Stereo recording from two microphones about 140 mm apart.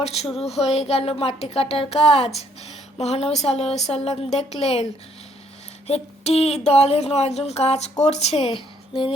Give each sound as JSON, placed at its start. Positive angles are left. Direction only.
{"t": 0.0, "sound": "speech", "side_deg": 50}
{"t": 5.9, "sound": "speech", "side_deg": 50}